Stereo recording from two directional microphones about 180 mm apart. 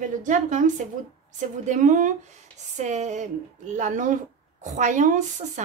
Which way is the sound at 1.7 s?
45° right (ahead or behind).